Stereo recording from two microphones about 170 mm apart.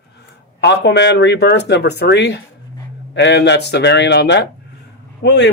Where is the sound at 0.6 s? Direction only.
90° left.